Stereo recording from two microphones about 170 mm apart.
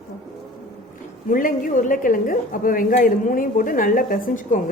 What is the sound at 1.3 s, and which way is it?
Speech, 55° left (ahead or behind).